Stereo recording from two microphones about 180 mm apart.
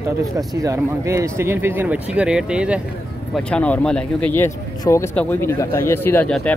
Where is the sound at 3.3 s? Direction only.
5° left (ahead or behind).